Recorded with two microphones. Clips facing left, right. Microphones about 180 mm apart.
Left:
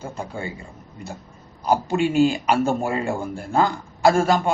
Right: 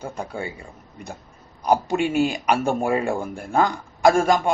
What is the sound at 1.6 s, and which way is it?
A man's voice, 15° right (ahead or behind).